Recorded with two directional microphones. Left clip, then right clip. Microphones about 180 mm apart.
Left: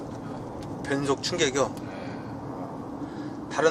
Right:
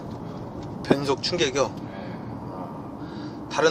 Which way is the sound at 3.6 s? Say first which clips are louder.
Right 2 dB; 15° right (ahead or behind).